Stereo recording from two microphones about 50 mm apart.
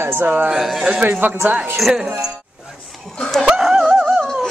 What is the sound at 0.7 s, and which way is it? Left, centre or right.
Speech, centre.